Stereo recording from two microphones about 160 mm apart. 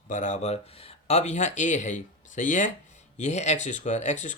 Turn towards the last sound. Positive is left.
turn(degrees=50)  # may be behind; listen again after turning